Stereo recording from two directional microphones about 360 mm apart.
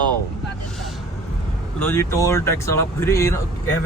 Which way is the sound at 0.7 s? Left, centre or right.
Centre.